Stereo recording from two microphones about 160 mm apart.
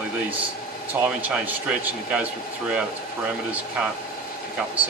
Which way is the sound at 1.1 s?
10° right (ahead or behind).